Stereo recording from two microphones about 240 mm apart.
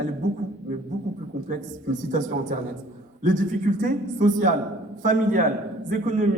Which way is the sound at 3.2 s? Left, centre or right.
Right.